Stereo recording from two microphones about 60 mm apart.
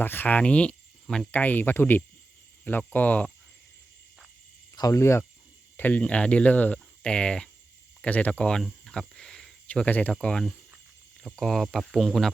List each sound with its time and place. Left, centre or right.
0.0 s speech: left; by 1.3 s centre
1.3 s speech: left
4.7 s cricket: left
4.9 s speech: left
5.7 s speech: left
6.0 s speech: left
7.0 s speech: centre
8.6 s cricket: centre
9.6 s speech: left
10.1 s speech: centre